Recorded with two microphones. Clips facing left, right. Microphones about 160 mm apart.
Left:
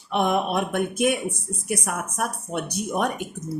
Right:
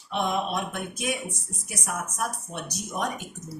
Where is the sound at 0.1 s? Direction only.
55° left (ahead or behind).